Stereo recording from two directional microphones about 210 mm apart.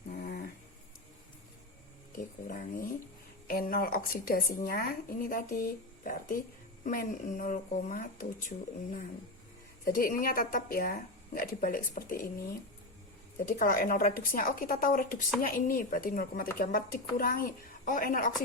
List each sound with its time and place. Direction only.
0.1 s dog: 45° left (ahead or behind)
2.1 s a woman's voice: 40° left (ahead or behind)
13.6 s a woman's voice: 40° left (ahead or behind)